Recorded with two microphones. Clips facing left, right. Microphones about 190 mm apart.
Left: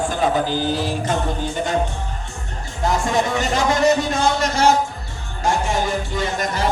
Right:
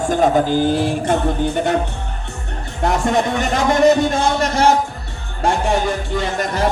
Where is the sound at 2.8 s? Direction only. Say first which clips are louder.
Right 2 dB; 60° right (ahead or behind).